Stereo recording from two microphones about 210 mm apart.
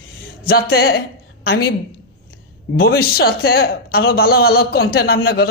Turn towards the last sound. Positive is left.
turn(degrees=45)  # may be behind; listen again after turning